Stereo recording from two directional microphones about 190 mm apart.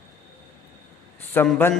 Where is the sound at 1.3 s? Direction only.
10° left (ahead or behind).